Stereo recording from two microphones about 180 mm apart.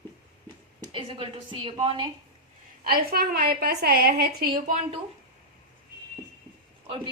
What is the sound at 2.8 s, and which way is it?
A woman's voice, 55° right (ahead or behind).